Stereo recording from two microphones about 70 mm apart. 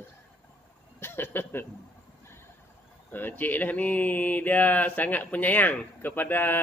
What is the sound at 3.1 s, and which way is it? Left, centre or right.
Mantra, left.